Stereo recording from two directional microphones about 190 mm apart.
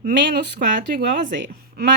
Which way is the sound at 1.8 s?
55° right (ahead or behind).